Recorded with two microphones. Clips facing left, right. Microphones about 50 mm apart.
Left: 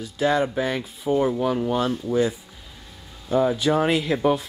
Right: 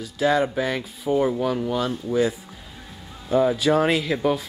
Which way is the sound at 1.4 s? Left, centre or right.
Centre.